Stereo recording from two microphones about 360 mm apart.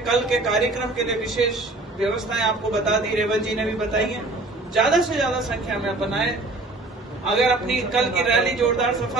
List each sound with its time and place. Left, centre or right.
0.0 s a man's voice: centre